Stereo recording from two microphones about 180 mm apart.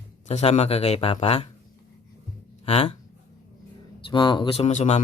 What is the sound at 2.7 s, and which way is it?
Speech, 35° left (ahead or behind).